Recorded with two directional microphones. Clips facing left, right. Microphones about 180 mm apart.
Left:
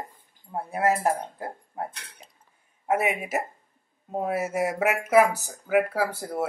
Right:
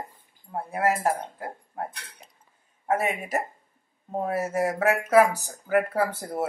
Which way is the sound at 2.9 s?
10° left (ahead or behind).